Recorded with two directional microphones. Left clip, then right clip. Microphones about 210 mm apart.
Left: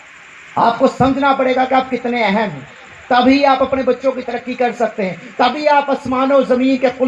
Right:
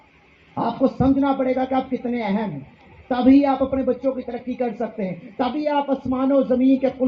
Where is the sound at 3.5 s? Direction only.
35° left (ahead or behind).